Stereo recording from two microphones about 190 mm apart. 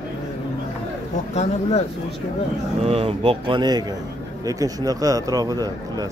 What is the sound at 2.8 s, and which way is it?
Speech, 30° right (ahead or behind).